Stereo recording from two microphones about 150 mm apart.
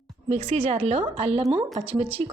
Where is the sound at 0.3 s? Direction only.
45° right (ahead or behind).